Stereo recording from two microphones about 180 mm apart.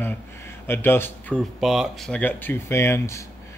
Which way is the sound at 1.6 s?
Centre (ahead or behind).